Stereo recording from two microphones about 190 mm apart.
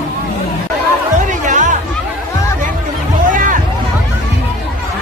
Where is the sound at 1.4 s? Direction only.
40° right (ahead or behind).